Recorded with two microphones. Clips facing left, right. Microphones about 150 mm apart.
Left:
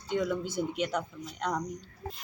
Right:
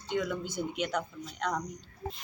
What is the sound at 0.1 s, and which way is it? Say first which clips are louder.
Speech: left 2 dB; centre (ahead or behind).